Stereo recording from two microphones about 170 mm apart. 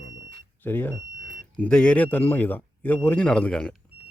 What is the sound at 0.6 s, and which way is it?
Speech, 10° left (ahead or behind).